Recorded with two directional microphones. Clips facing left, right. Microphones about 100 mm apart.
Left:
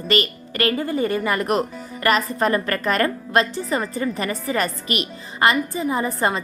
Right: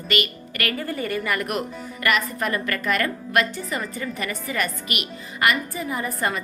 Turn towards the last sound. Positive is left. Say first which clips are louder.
# left 5 dB
turn(degrees=30)  # may be behind; listen again after turning